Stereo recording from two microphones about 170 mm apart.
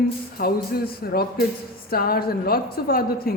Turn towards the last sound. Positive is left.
turn(degrees=60)  # may be behind; listen again after turning